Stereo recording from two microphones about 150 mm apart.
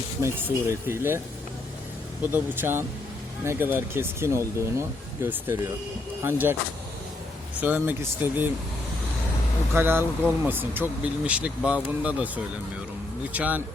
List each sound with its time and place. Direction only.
0.2 s speech: 15° right (ahead or behind)
2.3 s speech: 15° right (ahead or behind)
7.6 s speech: 10° right (ahead or behind)
9.7 s speech: 15° right (ahead or behind)